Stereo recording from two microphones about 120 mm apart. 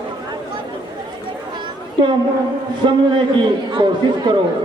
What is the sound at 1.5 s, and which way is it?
Children playing, 40° right (ahead or behind).